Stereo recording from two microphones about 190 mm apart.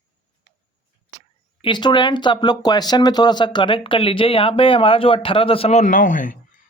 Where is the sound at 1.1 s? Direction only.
50° right (ahead or behind).